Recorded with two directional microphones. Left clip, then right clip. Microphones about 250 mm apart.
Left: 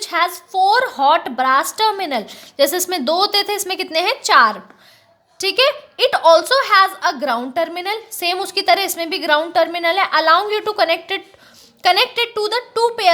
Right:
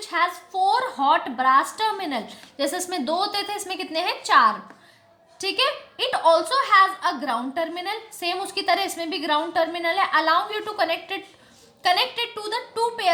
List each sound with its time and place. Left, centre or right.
0.0 s a woman's voice: left